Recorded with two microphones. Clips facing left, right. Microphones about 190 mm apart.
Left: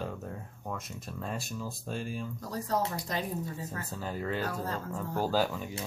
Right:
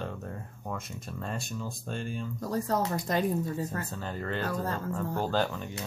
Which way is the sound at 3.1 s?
50° right (ahead or behind).